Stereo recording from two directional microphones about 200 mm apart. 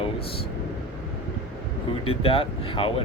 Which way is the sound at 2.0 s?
30° left (ahead or behind).